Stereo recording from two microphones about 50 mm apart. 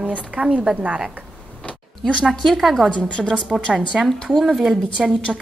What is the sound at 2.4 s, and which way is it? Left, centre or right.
Speech, centre.